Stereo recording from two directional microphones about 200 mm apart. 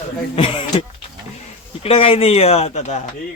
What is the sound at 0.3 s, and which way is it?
A man's voice, 25° left (ahead or behind).